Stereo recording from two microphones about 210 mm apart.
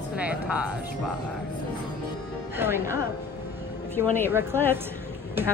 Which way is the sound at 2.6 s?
10° right (ahead or behind).